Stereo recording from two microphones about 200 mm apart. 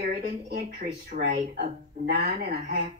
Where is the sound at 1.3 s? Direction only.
40° right (ahead or behind).